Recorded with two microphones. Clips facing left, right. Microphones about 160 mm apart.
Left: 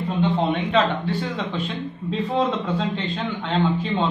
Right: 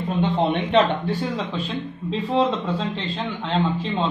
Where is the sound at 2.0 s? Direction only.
30° right (ahead or behind).